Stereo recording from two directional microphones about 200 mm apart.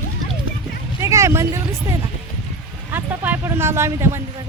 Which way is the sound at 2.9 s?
10° right (ahead or behind).